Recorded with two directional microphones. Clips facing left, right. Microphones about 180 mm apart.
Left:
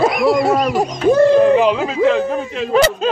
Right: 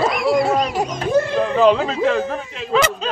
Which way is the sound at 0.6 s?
45° left (ahead or behind).